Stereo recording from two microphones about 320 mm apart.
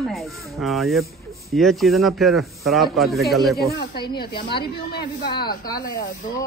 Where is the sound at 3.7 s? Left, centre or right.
Left.